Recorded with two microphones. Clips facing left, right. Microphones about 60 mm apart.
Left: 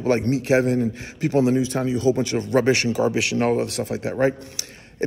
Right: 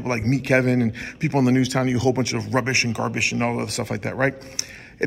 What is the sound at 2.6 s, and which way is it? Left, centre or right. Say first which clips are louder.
Speech: left 4 dB; right.